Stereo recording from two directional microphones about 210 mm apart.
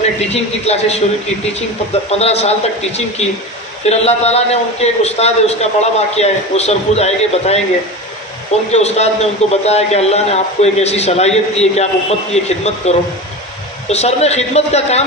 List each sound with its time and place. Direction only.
0.6 s a man's voice: 30° left (ahead or behind)
8.7 s a man's voice: 30° left (ahead or behind)